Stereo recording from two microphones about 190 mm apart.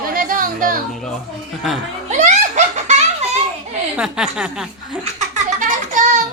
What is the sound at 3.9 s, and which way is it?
Speech, 5° right (ahead or behind).